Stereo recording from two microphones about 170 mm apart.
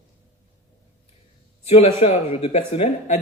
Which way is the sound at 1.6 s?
40° left (ahead or behind).